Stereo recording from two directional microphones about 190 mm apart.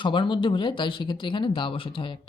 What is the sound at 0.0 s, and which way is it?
Speech, 25° left (ahead or behind).